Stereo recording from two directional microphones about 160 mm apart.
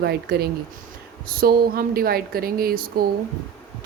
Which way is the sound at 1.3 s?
70° right (ahead or behind).